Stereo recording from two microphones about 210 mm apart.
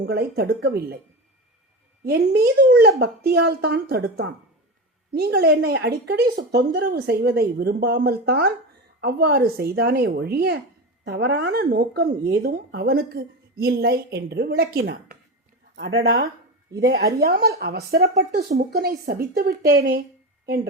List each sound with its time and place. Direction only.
0.0 s speech: 50° right (ahead or behind)
2.0 s speech: 50° right (ahead or behind)